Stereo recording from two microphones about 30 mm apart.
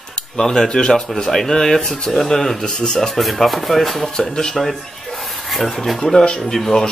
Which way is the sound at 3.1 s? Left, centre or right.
Centre.